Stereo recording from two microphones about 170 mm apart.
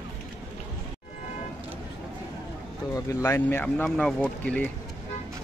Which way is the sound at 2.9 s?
15° left (ahead or behind).